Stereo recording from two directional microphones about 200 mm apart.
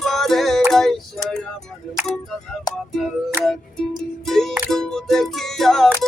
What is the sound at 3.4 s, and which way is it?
Music, 10° right (ahead or behind).